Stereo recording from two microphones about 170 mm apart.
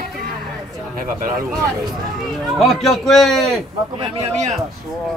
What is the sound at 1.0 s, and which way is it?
Speech, 55° right (ahead or behind).